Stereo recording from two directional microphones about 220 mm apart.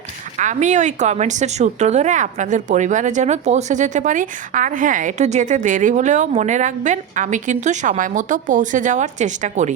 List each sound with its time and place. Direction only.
0.3 s a woman's voice: 35° right (ahead or behind)